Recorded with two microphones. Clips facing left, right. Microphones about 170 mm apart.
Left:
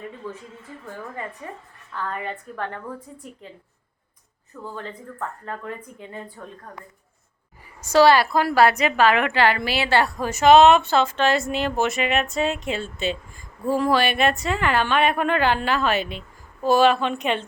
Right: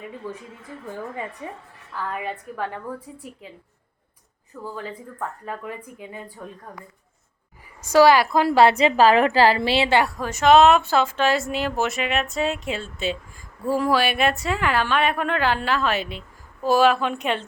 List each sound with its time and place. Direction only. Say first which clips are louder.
0.2 s speech: right 1 dB; 10° right (ahead or behind)
1.4 s speech: right 2 dB; 15° right (ahead or behind)
4.6 s speech: right 1 dB; 5° right (ahead or behind)
7.9 s a woman's voice: right 1 dB; 15° right (ahead or behind)
10.2 s speech: left 2 dB; 5° left (ahead or behind)